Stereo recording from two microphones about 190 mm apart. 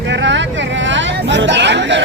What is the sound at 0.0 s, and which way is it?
Hubbub, 70° right (ahead or behind).